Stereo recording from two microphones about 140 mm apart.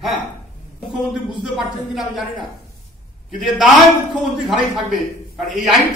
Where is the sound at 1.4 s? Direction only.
Centre (ahead or behind).